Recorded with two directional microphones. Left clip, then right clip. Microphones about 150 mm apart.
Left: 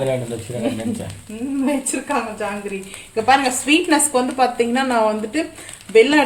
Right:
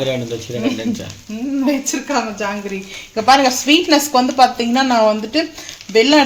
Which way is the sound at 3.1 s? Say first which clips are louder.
Right 4 dB; 30° right (ahead or behind).